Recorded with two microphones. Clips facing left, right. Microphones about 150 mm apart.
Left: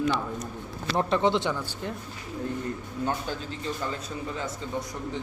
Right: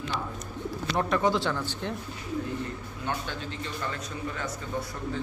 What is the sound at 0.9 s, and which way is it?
Speech, 30° left (ahead or behind).